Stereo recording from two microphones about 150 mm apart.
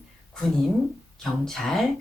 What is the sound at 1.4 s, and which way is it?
Speech, centre (ahead or behind).